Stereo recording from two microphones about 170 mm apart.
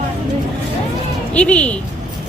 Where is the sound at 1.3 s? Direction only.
5° left (ahead or behind).